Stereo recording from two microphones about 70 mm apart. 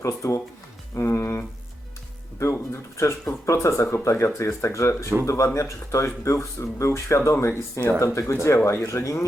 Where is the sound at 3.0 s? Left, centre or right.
Left.